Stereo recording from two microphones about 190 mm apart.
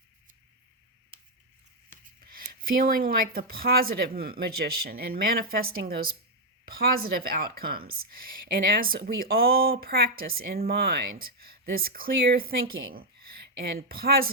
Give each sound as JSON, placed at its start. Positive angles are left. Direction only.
{"t": 1.9, "sound": "speech", "side_deg": -45}